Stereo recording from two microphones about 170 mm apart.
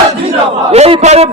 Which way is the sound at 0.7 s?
40° right (ahead or behind).